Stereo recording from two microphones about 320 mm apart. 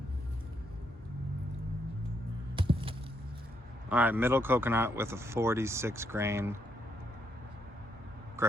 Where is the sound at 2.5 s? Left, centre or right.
Centre.